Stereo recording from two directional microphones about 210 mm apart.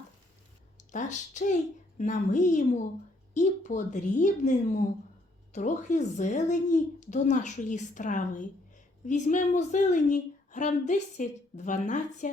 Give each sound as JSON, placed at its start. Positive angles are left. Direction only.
{"t": 0.9, "sound": "speech", "side_deg": 35}